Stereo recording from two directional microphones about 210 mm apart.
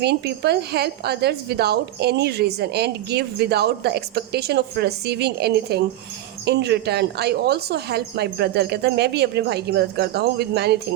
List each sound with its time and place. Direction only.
0.0 s a woman's voice: 50° right (ahead or behind)